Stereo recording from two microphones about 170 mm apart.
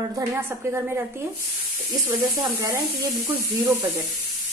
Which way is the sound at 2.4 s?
20° right (ahead or behind).